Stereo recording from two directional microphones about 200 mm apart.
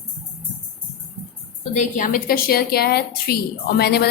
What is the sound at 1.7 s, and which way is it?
A woman's voice, 40° left (ahead or behind).